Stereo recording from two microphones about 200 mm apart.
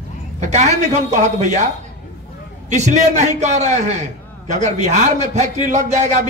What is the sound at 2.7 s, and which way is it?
A man's voice, 35° right (ahead or behind).